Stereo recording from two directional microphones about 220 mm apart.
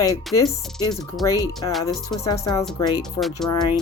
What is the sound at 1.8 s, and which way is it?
Speech, 15° left (ahead or behind).